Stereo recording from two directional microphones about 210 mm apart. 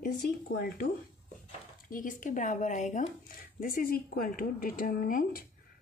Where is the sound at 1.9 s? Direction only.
40° left (ahead or behind).